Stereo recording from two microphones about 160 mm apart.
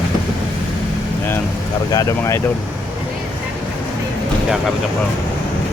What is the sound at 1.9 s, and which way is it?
Speech, 20° left (ahead or behind).